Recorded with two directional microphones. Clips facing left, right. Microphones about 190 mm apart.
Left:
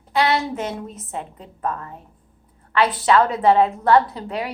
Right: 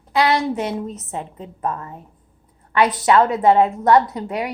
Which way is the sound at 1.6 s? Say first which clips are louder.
Right 1 dB; 20° right (ahead or behind).